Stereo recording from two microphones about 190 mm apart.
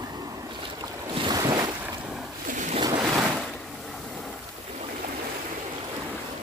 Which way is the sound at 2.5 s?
40° right (ahead or behind).